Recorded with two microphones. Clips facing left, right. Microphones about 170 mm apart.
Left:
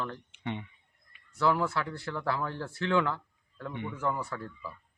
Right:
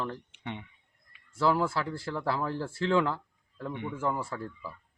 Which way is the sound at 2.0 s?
30° right (ahead or behind).